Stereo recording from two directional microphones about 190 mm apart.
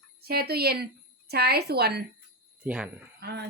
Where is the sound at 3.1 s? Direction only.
60° right (ahead or behind).